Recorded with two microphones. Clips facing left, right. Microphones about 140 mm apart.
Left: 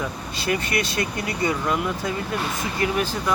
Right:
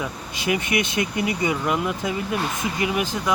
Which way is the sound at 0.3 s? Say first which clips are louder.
Right 2 dB; 15° right (ahead or behind).